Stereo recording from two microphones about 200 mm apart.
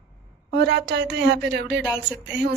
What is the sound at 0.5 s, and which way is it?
Speech, 55° right (ahead or behind).